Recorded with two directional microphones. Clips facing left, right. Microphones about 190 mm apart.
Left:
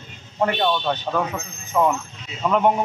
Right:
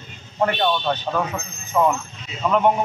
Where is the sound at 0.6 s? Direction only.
5° right (ahead or behind).